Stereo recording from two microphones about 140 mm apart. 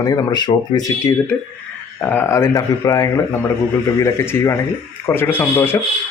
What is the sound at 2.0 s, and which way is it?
Speech, 15° left (ahead or behind).